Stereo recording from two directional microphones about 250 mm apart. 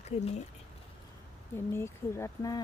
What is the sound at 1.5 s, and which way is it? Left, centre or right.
Speech, centre.